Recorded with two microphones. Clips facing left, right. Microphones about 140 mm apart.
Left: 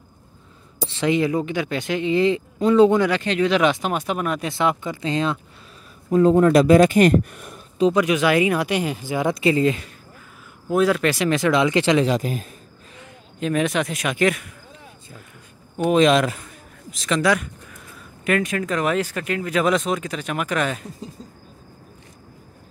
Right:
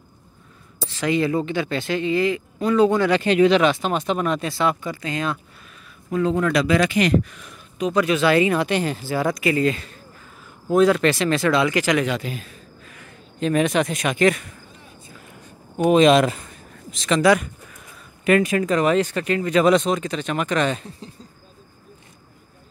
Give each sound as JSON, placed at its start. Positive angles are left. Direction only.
{"t": 0.9, "sound": "speech", "side_deg": 20}
{"t": 3.1, "sound": "speech", "side_deg": -10}
{"t": 3.5, "sound": "speech", "side_deg": 15}
{"t": 4.5, "sound": "speech", "side_deg": 20}
{"t": 6.0, "sound": "speech", "side_deg": 40}
{"t": 7.9, "sound": "speech", "side_deg": 15}
{"t": 10.7, "sound": "speech", "side_deg": 5}
{"t": 12.2, "sound": "speech", "side_deg": 40}
{"t": 13.4, "sound": "speech", "side_deg": 0}
{"t": 15.9, "sound": "speech", "side_deg": 0}